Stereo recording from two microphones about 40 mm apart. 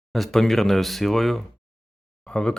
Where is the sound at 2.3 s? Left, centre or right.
Left.